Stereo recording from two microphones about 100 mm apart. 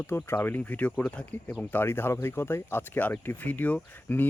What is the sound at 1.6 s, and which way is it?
Speech, 20° left (ahead or behind).